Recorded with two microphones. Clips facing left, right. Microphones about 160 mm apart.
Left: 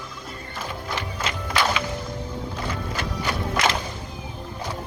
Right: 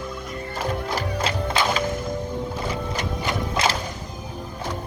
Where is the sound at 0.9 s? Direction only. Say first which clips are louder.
Right 5 dB; 35° right (ahead or behind).